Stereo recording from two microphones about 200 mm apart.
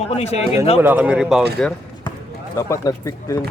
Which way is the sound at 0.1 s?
30° left (ahead or behind).